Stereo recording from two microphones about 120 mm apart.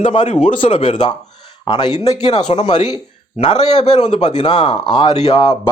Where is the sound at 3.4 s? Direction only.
55° left (ahead or behind).